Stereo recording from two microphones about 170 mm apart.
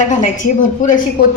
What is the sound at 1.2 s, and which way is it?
Speech, 65° left (ahead or behind).